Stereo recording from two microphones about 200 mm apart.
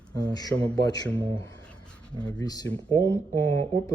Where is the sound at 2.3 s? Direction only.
20° left (ahead or behind).